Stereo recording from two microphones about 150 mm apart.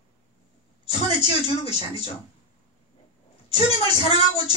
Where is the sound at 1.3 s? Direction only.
40° left (ahead or behind).